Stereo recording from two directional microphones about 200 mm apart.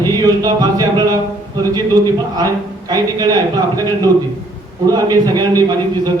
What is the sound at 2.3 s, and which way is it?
Speech, 20° right (ahead or behind).